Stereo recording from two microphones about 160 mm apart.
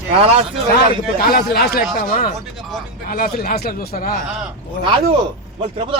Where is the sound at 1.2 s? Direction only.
75° left (ahead or behind).